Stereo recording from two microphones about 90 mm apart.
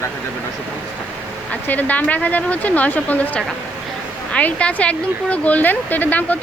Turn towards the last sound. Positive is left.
turn(degrees=20)  # may be behind; listen again after turning